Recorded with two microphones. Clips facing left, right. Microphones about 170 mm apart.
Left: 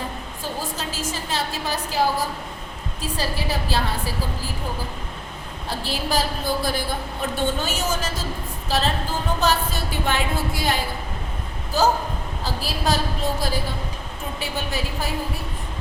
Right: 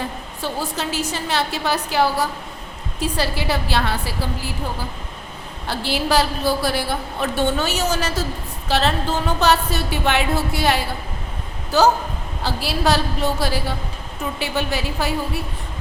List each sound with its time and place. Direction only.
0.6 s a woman's voice: 70° right (ahead or behind)
5.6 s a woman's voice: 70° right (ahead or behind)